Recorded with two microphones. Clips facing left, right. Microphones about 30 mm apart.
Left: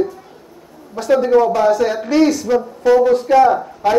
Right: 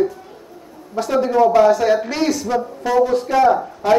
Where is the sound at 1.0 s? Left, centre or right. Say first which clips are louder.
Left 3 dB; centre.